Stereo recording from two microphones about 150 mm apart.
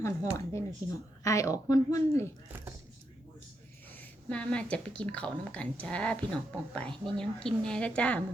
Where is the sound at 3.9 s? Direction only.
10° left (ahead or behind).